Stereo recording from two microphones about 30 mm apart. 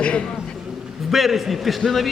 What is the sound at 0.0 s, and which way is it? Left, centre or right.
Speech, left.